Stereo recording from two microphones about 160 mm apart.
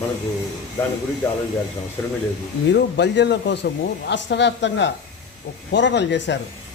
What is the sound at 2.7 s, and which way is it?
Speech, 90° left.